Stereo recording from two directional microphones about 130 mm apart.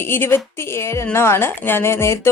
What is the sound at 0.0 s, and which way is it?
Speech, 15° left (ahead or behind).